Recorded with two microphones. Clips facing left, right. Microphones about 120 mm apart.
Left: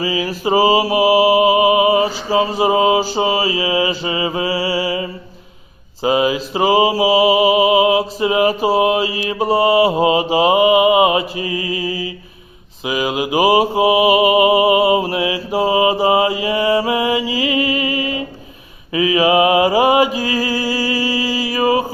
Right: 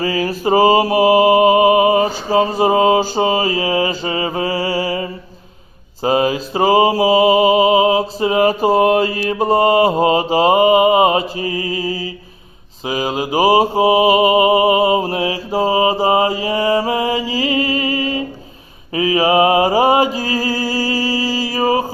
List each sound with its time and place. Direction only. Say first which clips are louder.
0.0 s mantra: right 2 dB; 45° right (ahead or behind)
20.1 s music: even; 40° right (ahead or behind)